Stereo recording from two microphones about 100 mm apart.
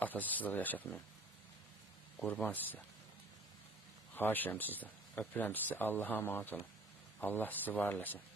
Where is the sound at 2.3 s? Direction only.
20° left (ahead or behind).